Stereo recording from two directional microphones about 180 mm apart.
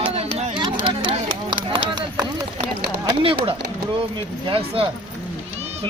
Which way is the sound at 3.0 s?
30° right (ahead or behind).